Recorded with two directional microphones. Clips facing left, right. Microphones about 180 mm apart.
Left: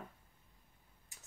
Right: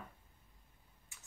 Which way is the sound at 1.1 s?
40° left (ahead or behind).